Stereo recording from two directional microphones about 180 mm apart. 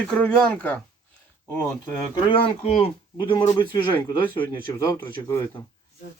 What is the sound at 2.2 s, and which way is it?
Speech, 30° left (ahead or behind).